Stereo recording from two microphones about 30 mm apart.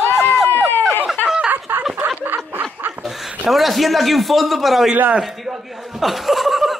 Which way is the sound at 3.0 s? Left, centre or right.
Centre.